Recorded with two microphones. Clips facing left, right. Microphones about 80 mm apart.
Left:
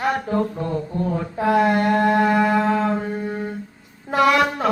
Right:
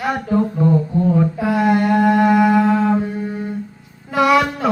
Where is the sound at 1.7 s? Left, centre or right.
Centre.